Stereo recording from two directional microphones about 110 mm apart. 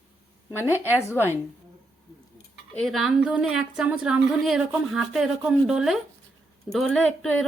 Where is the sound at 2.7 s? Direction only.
Centre (ahead or behind).